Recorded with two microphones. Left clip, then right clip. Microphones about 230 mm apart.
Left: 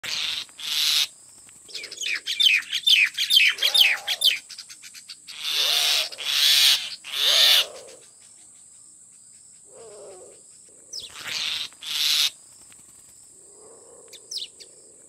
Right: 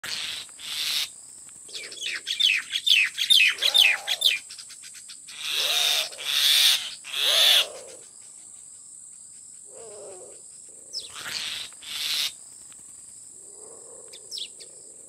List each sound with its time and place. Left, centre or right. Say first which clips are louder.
0.0 s cricket: left 4 dB; centre
0.6 s owl: left 6 dB; centre
2.0 s bird: left 3 dB; left
4.4 s cricket: left 1 dB; left
5.3 s owl: left 3 dB; left
7.6 s owl: even; centre
9.8 s wild animals: even; centre
11.1 s insect: left 5 dB; centre
11.8 s owl: left 6 dB; centre
13.6 s a sound: right 1 dB; centre
14.1 s chirp: left 2 dB; left